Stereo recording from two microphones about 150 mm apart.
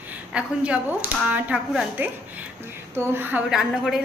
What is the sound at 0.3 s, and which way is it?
Speech, 10° right (ahead or behind).